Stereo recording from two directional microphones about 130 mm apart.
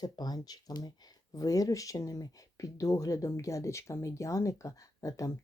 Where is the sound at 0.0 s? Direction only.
30° left (ahead or behind).